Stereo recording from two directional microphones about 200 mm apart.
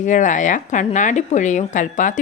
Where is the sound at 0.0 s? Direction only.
40° left (ahead or behind).